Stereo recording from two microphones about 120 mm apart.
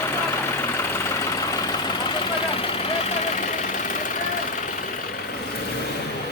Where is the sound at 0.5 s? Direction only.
20° left (ahead or behind).